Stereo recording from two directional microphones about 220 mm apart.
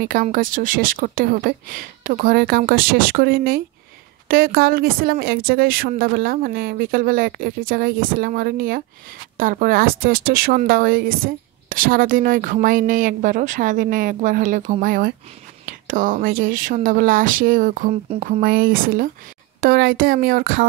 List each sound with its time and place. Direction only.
0.0 s speech: 40° right (ahead or behind)